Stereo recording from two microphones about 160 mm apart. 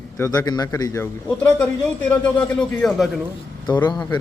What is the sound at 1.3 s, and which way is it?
Speech, 5° left (ahead or behind).